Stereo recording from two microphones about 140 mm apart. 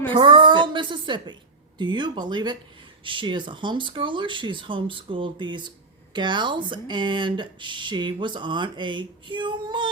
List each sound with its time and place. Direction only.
0.1 s speech: 35° right (ahead or behind)